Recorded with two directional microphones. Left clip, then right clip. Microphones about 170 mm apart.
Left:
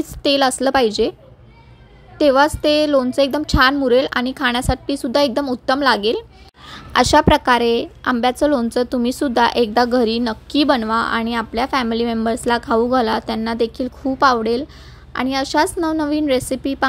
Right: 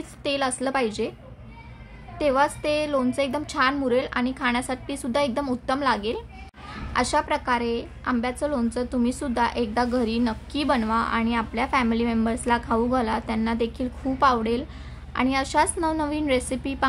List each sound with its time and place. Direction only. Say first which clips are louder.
0.2 s a woman's voice: left 9 dB; 40° left (ahead or behind)
2.1 s a woman's voice: left 8 dB; 40° left (ahead or behind)